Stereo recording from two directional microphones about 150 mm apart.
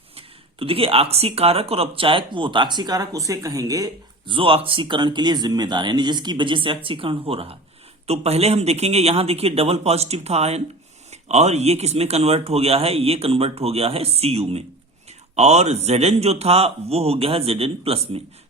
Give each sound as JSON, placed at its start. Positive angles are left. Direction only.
{"t": 0.2, "sound": "speech", "side_deg": -40}